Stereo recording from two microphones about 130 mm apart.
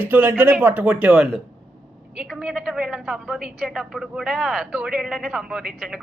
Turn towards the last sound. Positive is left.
turn(degrees=-5)  # may be behind; listen again after turning